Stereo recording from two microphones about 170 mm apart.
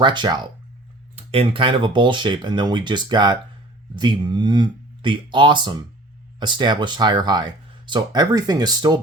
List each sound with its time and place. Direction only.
0.0 s speech: 25° right (ahead or behind)